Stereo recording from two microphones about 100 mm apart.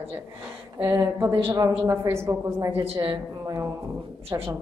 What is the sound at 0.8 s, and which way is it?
A man's voice, 30° right (ahead or behind).